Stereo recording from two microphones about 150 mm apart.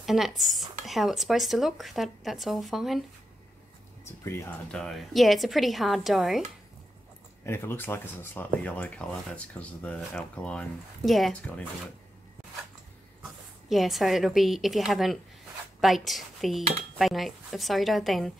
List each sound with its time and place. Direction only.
0.0 s speech: centre (ahead or behind)
4.0 s a sound: 15° left (ahead or behind)
4.6 s speech: 5° left (ahead or behind)
7.4 s speech: 15° left (ahead or behind)
13.2 s a woman's voice: centre (ahead or behind)